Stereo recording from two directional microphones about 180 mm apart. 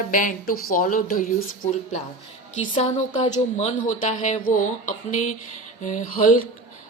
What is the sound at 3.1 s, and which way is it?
A woman's voice, 40° left (ahead or behind).